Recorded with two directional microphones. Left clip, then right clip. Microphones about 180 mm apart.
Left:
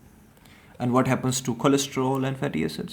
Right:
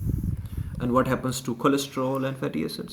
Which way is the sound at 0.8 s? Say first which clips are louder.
Even; 45° left (ahead or behind).